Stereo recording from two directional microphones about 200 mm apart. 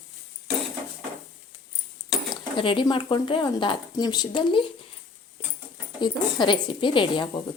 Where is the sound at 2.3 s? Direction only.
25° left (ahead or behind).